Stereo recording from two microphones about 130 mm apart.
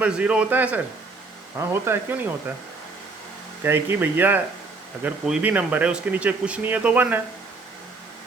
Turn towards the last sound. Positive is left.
turn(degrees=-10)  # may be behind; listen again after turning